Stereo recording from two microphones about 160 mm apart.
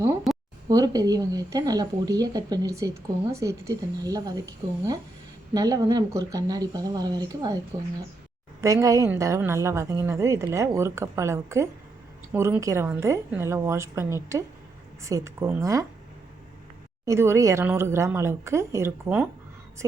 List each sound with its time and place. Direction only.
0.3 s a sound: centre (ahead or behind)
0.7 s speech: 25° right (ahead or behind)
8.6 s a woman's voice: 20° right (ahead or behind)
17.1 s a woman's voice: 15° right (ahead or behind)